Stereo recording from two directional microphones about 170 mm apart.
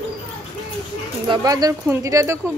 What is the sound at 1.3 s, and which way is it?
Speech, 20° right (ahead or behind).